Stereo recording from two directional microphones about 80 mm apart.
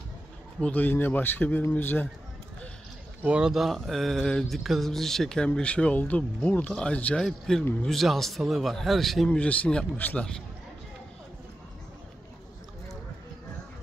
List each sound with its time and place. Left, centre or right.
0.6 s speech: centre
3.2 s speech: centre
7.2 s speech: centre
9.4 s speech: centre